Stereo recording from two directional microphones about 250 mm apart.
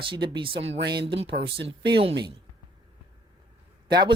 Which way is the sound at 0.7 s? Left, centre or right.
Right.